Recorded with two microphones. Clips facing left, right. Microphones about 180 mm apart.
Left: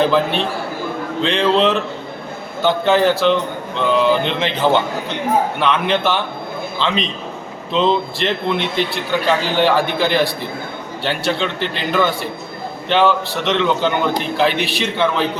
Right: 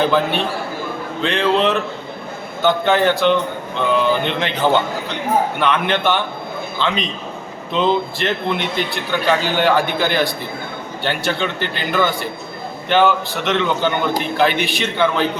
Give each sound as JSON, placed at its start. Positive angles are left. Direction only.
{"t": 0.0, "sound": "a man's voice", "side_deg": 0}
{"t": 8.2, "sound": "a man's voice", "side_deg": 0}